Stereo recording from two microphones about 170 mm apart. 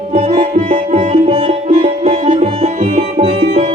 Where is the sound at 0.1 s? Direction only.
35° right (ahead or behind).